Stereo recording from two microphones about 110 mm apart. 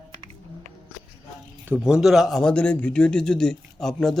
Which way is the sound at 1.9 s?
5° right (ahead or behind).